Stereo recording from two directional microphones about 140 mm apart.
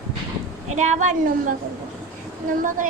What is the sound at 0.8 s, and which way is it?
Speech, 60° right (ahead or behind).